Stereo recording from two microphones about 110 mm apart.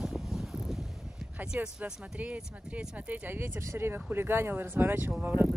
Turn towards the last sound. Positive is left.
turn(degrees=-15)  # may be behind; listen again after turning